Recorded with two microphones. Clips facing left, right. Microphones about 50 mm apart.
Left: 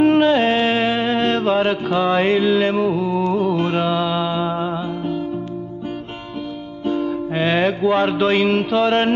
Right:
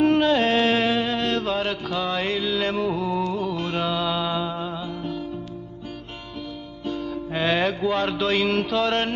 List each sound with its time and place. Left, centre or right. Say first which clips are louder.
0.0 s mantra: left 5 dB; left
6.9 s music: left 8 dB; left
7.3 s mantra: left 4 dB; centre